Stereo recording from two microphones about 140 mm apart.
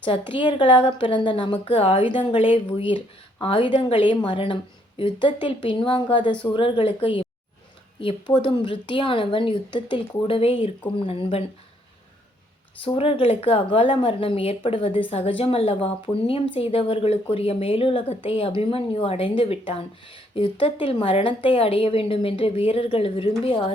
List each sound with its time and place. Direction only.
0.0 s speech: 35° left (ahead or behind)
12.8 s speech: 40° left (ahead or behind)